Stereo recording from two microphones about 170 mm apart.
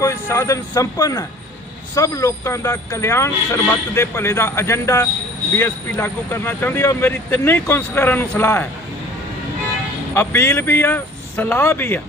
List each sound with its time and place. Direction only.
0.0 s speech: 15° left (ahead or behind)
10.2 s speech: 15° left (ahead or behind)